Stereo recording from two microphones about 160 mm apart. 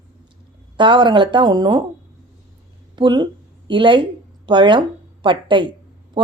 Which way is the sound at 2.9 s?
30° right (ahead or behind).